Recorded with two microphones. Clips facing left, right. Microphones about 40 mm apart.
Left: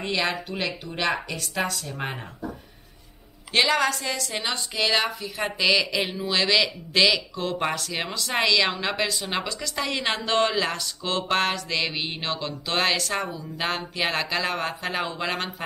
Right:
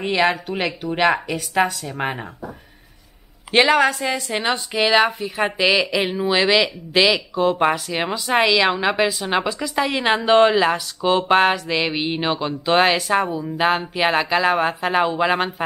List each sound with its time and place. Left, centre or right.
0.0 s speech: right
3.5 s speech: right